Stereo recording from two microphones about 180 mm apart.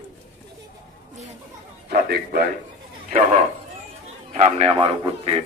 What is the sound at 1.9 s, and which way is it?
Speech, 55° right (ahead or behind).